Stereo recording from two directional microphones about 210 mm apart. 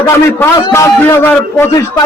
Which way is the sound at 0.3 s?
15° left (ahead or behind).